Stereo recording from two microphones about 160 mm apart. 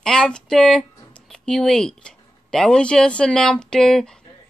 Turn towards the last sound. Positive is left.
turn(degrees=5)  # may be behind; listen again after turning